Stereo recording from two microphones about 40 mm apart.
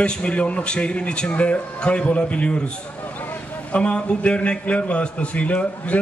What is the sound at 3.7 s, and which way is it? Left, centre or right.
A man's voice, left.